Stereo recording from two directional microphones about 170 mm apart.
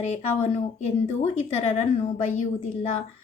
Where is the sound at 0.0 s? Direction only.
40° left (ahead or behind).